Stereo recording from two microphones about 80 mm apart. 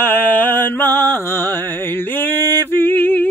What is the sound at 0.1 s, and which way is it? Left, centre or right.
Music, left.